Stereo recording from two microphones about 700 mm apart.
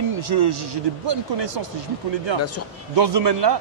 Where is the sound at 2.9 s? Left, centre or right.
Right.